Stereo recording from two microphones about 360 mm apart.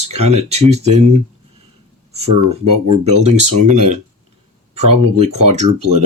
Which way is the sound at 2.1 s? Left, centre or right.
Centre.